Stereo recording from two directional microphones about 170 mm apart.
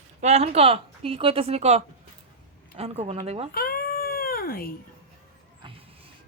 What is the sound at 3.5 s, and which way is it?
Baby cry, 60° left (ahead or behind).